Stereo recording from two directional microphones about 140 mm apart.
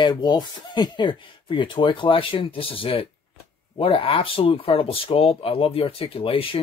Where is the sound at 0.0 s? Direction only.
35° left (ahead or behind).